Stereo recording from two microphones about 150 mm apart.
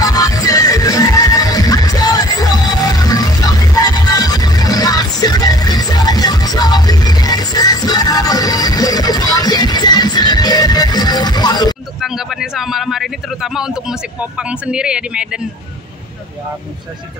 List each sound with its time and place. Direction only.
0.0 s music: 25° left (ahead or behind)
12.0 s a man's voice: centre (ahead or behind)